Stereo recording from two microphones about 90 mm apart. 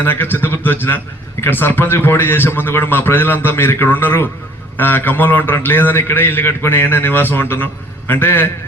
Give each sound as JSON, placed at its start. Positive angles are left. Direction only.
{"t": 0.0, "sound": "a man's voice", "side_deg": 25}